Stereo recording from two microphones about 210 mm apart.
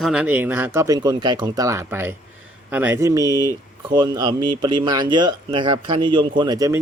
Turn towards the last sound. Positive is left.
turn(degrees=-15)  # may be behind; listen again after turning